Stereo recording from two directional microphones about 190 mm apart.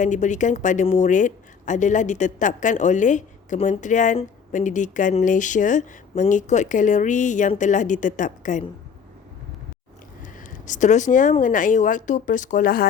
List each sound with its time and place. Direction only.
0.0 s speech: 40° left (ahead or behind)
10.2 s speech: 45° left (ahead or behind)